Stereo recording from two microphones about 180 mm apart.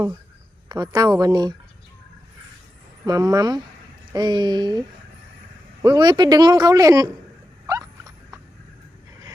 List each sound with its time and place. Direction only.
0.7 s a man's voice: 20° right (ahead or behind)
3.1 s a man's voice: 20° right (ahead or behind)
5.8 s a man's voice: 20° right (ahead or behind)
7.7 s a sound: 20° right (ahead or behind)